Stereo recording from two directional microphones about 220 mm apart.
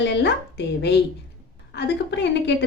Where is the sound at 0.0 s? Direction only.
50° left (ahead or behind).